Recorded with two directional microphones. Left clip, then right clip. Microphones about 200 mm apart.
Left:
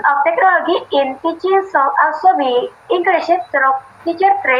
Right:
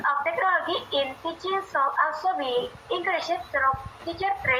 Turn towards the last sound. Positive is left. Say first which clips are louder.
# left 12 dB
turn(degrees=50)  # may be behind; listen again after turning